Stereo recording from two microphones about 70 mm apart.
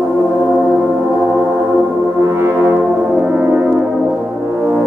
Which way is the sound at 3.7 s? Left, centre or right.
Centre.